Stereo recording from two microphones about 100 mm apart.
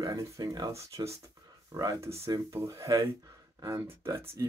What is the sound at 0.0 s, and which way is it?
Speech, 35° right (ahead or behind).